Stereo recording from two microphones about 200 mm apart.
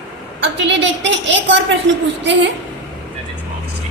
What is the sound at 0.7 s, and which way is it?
Speech, 65° right (ahead or behind).